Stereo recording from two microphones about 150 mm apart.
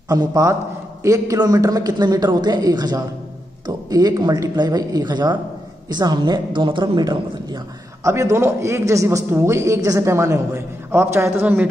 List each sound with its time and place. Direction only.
0.1 s a man's voice: 25° right (ahead or behind)